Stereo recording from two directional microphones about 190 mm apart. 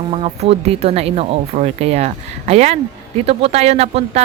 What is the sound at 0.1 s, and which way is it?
Speech, 35° right (ahead or behind).